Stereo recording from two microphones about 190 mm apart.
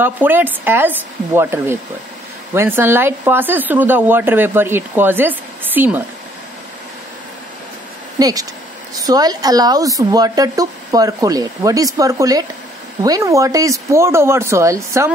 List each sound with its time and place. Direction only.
0.0 s speech: 10° right (ahead or behind)
8.2 s speech: 20° right (ahead or behind)